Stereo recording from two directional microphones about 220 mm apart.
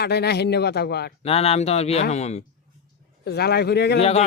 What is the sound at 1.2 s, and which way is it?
Speech, 25° left (ahead or behind).